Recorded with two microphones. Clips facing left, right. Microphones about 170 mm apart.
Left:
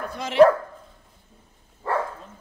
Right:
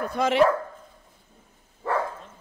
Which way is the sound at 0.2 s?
50° right (ahead or behind).